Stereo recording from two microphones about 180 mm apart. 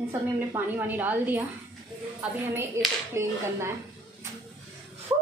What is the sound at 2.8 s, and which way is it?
Speech, 15° right (ahead or behind).